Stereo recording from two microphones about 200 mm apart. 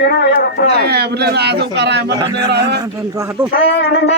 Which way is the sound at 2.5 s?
55° right (ahead or behind).